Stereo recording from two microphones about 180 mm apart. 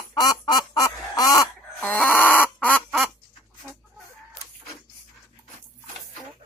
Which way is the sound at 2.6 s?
5° left (ahead or behind).